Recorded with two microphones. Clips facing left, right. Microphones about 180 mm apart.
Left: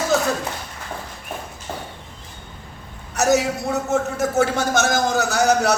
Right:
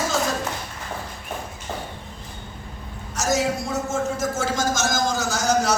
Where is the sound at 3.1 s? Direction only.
60° left (ahead or behind).